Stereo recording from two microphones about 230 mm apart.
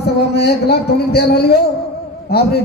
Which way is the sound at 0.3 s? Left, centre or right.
Left.